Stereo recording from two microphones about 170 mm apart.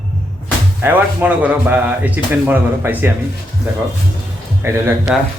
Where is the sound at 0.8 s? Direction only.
10° right (ahead or behind).